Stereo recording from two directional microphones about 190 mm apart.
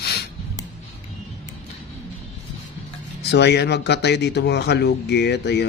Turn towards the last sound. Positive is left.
turn(degrees=65)  # may be behind; listen again after turning